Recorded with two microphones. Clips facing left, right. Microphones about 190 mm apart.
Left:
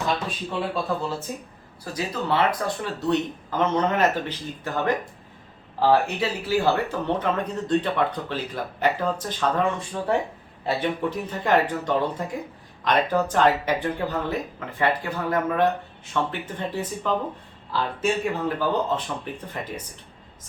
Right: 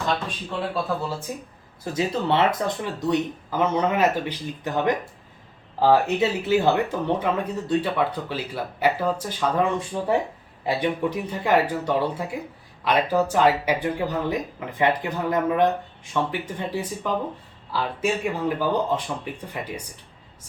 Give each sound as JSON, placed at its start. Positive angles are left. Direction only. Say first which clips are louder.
{"t": 0.3, "sound": "speech", "louder": "left 1 dB", "side_deg": 0}
{"t": 1.8, "sound": "speech", "louder": "right 4 dB", "side_deg": -25}
{"t": 7.2, "sound": "speech", "louder": "right 1 dB", "side_deg": -10}